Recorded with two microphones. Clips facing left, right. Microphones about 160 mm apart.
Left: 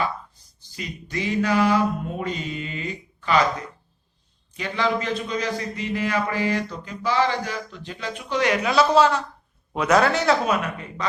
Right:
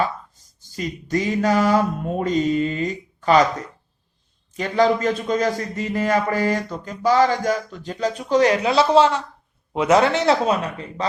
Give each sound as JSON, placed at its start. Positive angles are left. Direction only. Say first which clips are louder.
{"t": 0.6, "sound": "mantra", "louder": "right 7 dB", "side_deg": -45}
{"t": 4.5, "sound": "a man's voice", "louder": "right 6 dB", "side_deg": -40}